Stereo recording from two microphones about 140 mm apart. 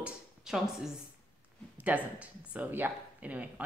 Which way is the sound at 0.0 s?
5° right (ahead or behind).